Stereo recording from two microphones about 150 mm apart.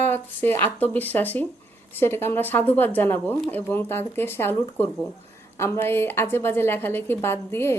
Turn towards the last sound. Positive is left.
turn(degrees=15)  # may be behind; listen again after turning